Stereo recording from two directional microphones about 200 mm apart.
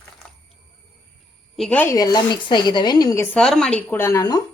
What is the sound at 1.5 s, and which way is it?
Speech, 5° left (ahead or behind).